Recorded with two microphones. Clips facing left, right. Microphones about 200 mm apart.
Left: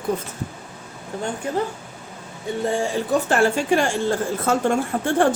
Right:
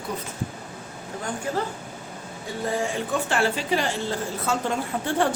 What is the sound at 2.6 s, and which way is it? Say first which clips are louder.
A woman's voice: left 4 dB; 30° left (ahead or behind).